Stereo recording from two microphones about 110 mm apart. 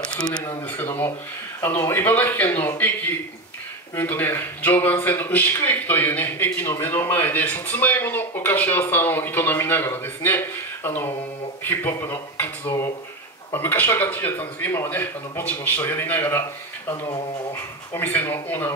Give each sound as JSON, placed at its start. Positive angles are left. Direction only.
{"t": 0.1, "sound": "speech", "side_deg": 10}
{"t": 0.7, "sound": "a man's voice", "side_deg": 20}
{"t": 3.9, "sound": "a man's voice", "side_deg": 20}
{"t": 17.5, "sound": "a man's voice", "side_deg": 20}